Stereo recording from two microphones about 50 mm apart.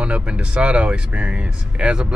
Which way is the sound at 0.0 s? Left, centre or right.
Right.